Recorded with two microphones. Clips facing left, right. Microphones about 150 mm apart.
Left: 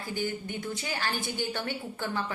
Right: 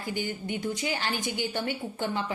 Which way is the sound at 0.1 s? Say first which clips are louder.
Right 1 dB; 15° right (ahead or behind).